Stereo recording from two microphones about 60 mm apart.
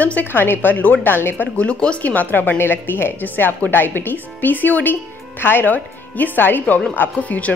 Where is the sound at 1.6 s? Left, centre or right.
Left.